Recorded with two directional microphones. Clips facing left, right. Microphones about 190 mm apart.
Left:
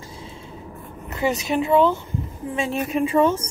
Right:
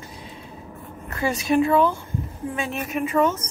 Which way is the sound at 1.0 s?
20° left (ahead or behind).